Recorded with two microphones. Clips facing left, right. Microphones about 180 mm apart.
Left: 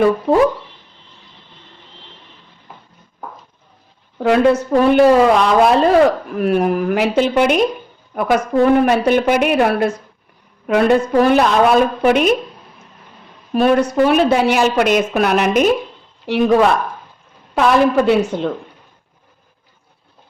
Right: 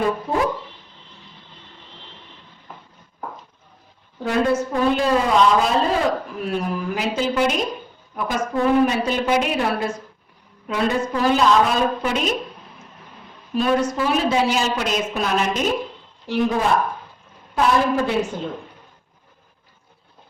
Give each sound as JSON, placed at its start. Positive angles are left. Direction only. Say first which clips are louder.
{"t": 4.2, "sound": "a woman's voice", "louder": "left 7 dB", "side_deg": 75}
{"t": 13.5, "sound": "a woman's voice", "louder": "left 6 dB", "side_deg": 60}